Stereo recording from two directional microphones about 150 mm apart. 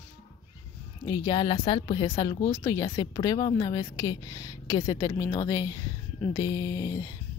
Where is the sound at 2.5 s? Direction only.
20° left (ahead or behind).